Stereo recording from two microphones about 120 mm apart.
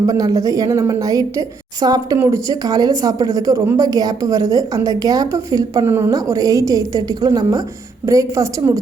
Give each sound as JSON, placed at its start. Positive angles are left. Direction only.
{"t": 0.0, "sound": "a woman's voice", "side_deg": -30}
{"t": 2.1, "sound": "a woman's voice", "side_deg": -20}
{"t": 2.5, "sound": "a woman's voice", "side_deg": -30}